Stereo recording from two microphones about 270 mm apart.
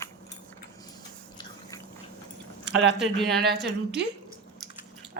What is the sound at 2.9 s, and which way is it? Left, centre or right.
Speech, centre.